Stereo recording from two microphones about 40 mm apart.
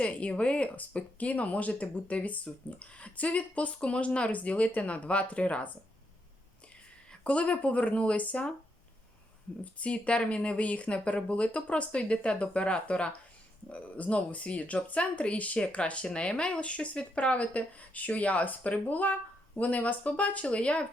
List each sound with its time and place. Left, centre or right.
0.0 s speech: left
7.3 s speech: left
9.8 s speech: left
16.0 s speech: left